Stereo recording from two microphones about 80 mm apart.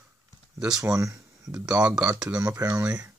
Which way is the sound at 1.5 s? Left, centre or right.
Centre.